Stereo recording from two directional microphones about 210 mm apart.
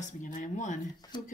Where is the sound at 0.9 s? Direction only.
20° left (ahead or behind).